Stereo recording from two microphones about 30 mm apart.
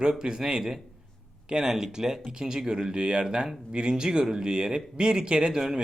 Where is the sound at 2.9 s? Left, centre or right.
Right.